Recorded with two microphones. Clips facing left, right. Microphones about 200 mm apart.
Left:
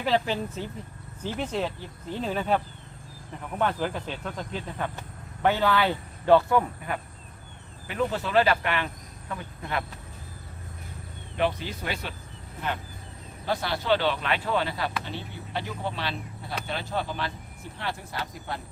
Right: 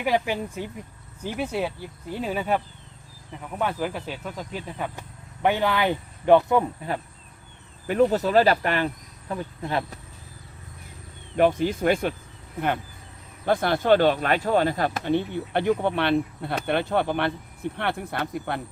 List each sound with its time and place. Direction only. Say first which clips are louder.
0.0 s speech: right 1 dB; 15° right (ahead or behind)
3.6 s speech: even; 10° right (ahead or behind)
7.9 s speech: right 8 dB; 40° right (ahead or behind)
11.3 s speech: right 7 dB; 50° right (ahead or behind)
13.4 s speech: right 7 dB; 50° right (ahead or behind)